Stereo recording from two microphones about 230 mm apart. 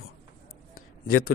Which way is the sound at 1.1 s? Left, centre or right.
Left.